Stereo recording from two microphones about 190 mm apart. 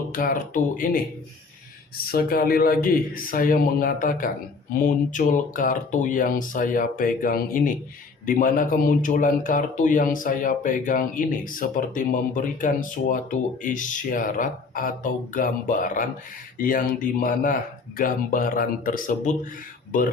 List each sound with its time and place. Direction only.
0.1 s speech: 45° left (ahead or behind)
2.0 s speech: 50° left (ahead or behind)